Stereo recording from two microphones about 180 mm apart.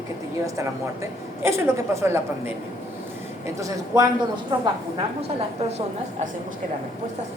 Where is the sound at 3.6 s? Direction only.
20° right (ahead or behind).